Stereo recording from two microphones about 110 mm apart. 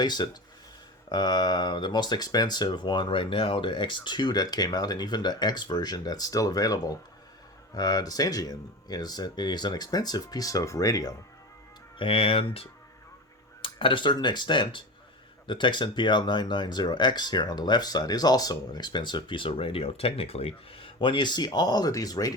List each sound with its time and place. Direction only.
0.0 s speech: 40° left (ahead or behind)
11.9 s speech: 55° left (ahead or behind); by 22.3 s 35° left (ahead or behind)